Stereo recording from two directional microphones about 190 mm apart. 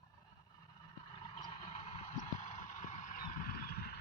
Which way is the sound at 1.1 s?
25° left (ahead or behind).